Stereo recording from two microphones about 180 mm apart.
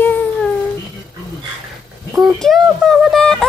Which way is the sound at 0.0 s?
10° left (ahead or behind).